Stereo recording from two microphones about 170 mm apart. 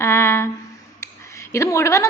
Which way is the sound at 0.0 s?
15° left (ahead or behind).